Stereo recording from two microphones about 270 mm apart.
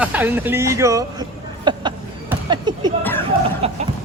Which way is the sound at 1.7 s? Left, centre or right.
Centre.